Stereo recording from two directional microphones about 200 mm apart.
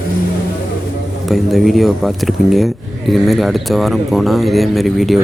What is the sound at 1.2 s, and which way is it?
Speech, centre (ahead or behind).